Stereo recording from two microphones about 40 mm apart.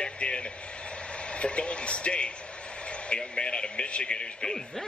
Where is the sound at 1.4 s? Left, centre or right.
Left.